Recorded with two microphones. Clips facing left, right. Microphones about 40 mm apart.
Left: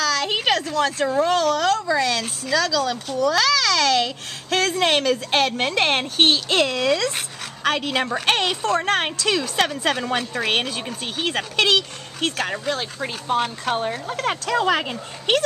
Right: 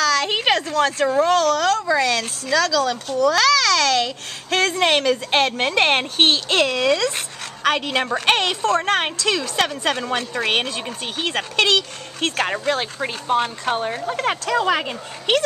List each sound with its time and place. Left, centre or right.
0.0 s a sound: centre
0.3 s a sound: centre
1.3 s a child's voice: centre
1.9 s speech: centre
4.5 s a woman's voice: centre
12.4 s a woman's voice: centre
13.4 s a woman's voice: centre